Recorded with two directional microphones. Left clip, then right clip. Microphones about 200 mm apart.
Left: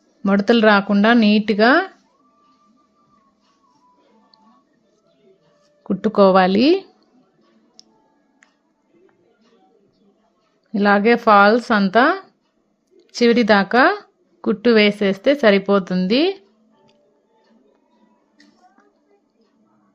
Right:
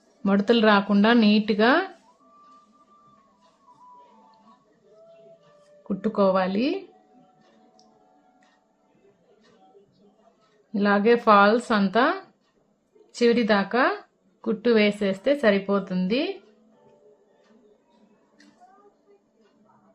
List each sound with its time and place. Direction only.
0.2 s speech: 20° left (ahead or behind)
5.9 s speech: 35° left (ahead or behind)
10.7 s speech: 30° left (ahead or behind)